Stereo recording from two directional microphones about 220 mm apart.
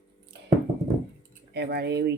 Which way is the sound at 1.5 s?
50° right (ahead or behind).